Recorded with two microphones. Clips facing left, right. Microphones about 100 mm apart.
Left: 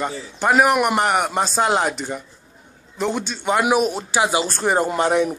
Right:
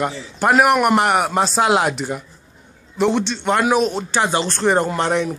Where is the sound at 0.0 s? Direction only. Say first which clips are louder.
Right 3 dB; centre (ahead or behind).